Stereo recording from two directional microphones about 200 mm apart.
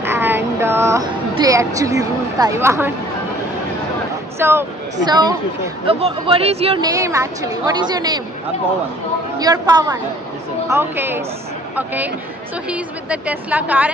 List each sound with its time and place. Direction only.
0.0 s music: 10° right (ahead or behind)
4.4 s a woman's voice: 10° right (ahead or behind); by 6.7 s 30° right (ahead or behind)
6.8 s a woman's voice: 15° right (ahead or behind)
9.4 s a woman's voice: 20° right (ahead or behind)